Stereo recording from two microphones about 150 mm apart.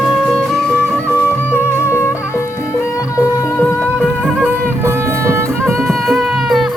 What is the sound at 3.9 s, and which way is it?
Music, 10° right (ahead or behind).